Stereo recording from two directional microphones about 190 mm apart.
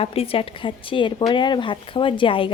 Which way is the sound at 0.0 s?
30° left (ahead or behind).